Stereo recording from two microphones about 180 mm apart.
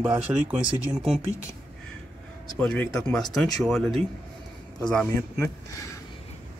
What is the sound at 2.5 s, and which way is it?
Speech, 5° left (ahead or behind).